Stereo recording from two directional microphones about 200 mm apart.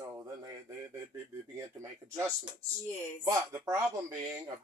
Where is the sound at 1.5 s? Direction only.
15° right (ahead or behind).